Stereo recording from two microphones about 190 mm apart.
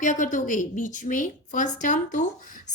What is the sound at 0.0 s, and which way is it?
A woman's voice, 40° left (ahead or behind).